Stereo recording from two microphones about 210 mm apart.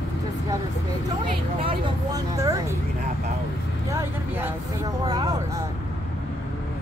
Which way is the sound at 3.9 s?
10° right (ahead or behind).